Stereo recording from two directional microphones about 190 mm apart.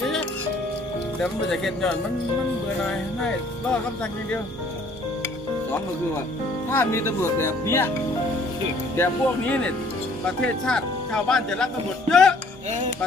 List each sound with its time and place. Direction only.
1.2 s speech: centre (ahead or behind)
6.7 s speech: 15° left (ahead or behind)
8.9 s speech: 10° left (ahead or behind)